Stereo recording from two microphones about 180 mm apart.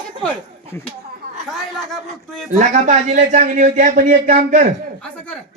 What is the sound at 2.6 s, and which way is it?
A man's voice, 45° right (ahead or behind).